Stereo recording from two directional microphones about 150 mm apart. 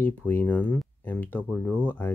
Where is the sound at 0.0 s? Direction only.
15° left (ahead or behind).